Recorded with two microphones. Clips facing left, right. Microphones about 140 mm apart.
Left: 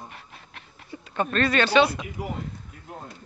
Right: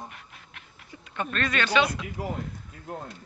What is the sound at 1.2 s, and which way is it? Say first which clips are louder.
Speech: left 6 dB; 35° left (ahead or behind).